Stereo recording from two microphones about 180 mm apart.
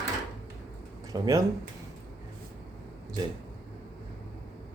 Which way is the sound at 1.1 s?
20° right (ahead or behind).